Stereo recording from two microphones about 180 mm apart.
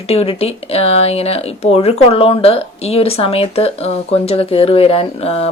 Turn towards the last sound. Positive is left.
turn(degrees=35)  # may be behind; listen again after turning